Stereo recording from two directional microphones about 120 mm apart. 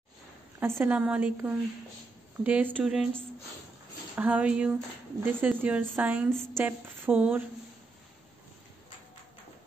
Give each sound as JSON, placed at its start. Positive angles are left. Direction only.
{"t": 0.6, "sound": "a woman's voice", "side_deg": -20}
{"t": 2.8, "sound": "speech", "side_deg": -5}
{"t": 4.1, "sound": "speech", "side_deg": -15}